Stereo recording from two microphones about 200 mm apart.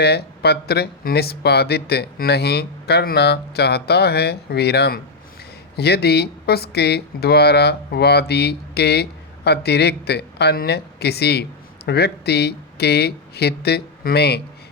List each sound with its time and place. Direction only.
0.0 s speech: 55° left (ahead or behind)